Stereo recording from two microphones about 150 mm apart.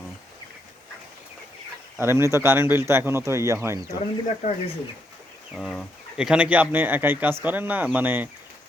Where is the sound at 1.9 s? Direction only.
15° right (ahead or behind).